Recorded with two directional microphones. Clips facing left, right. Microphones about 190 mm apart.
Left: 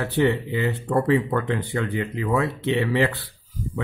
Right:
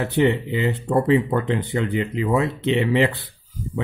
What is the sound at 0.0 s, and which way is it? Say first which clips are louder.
A man's voice: right 2 dB; 20° right (ahead or behind).